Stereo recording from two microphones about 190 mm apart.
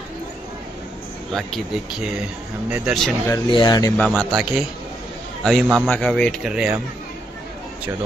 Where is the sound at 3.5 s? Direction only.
20° left (ahead or behind).